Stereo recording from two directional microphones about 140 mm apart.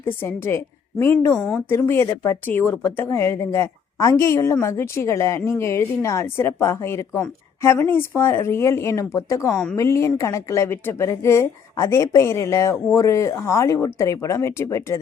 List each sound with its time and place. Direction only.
0.0 s a woman's voice: 15° left (ahead or behind)
1.4 s speech: 5° left (ahead or behind)
1.7 s speech: 20° left (ahead or behind)